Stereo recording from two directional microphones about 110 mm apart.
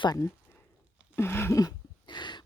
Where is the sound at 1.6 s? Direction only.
40° left (ahead or behind).